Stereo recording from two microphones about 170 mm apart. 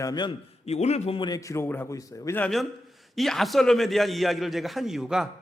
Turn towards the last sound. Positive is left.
turn(degrees=-5)  # may be behind; listen again after turning